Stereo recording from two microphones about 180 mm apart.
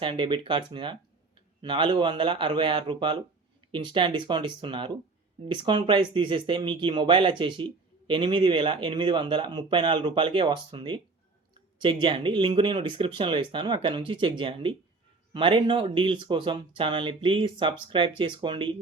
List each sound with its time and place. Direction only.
0.0 s speech: 30° right (ahead or behind)